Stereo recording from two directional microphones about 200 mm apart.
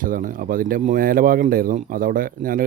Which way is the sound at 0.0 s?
45° right (ahead or behind).